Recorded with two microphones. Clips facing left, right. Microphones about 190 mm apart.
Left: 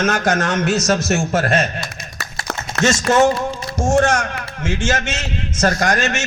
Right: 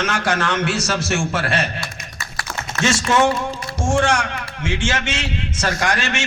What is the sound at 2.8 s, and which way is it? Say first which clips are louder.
A man's voice: left 3 dB; 40° left (ahead or behind).